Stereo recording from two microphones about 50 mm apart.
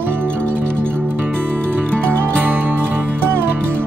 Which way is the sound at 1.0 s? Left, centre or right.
Right.